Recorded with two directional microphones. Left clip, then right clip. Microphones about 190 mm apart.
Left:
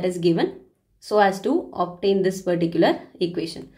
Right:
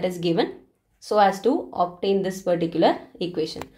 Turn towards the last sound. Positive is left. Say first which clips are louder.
# left 1 dB
turn(degrees=-25)  # may be behind; listen again after turning